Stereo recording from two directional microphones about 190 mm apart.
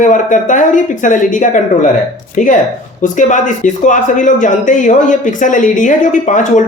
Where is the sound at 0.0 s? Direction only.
40° left (ahead or behind).